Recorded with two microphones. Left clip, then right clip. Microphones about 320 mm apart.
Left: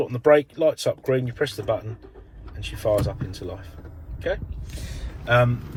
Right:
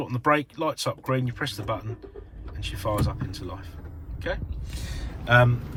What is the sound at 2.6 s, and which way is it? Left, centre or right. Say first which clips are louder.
Speech: left 6 dB; centre.